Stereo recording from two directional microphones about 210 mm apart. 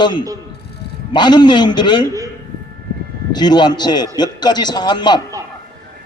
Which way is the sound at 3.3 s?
20° left (ahead or behind).